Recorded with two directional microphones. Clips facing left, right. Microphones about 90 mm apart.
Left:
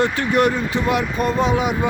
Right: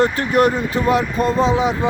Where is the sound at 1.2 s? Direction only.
30° right (ahead or behind).